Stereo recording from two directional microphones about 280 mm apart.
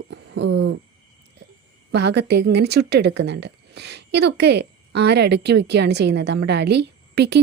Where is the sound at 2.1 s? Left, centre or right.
Right.